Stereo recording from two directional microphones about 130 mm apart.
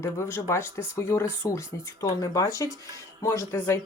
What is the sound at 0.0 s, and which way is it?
Speech, 20° left (ahead or behind).